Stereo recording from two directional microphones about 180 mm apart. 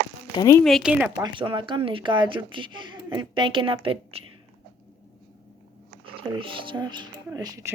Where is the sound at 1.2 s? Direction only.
30° right (ahead or behind).